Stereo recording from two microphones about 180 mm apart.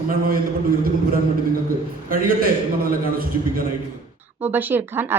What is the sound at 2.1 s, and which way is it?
Speech, 50° right (ahead or behind).